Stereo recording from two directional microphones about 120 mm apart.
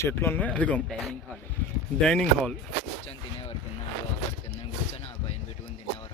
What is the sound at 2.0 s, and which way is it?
Speech, 5° left (ahead or behind).